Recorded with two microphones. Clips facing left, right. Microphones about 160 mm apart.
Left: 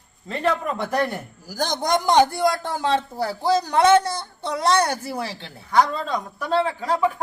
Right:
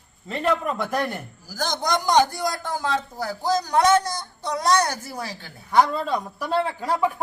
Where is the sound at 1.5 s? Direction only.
55° left (ahead or behind).